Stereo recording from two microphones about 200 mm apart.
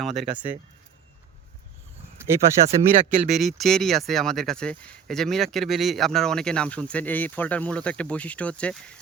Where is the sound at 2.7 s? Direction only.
40° right (ahead or behind).